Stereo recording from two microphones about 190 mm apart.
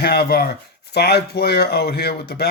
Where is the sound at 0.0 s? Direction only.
55° left (ahead or behind).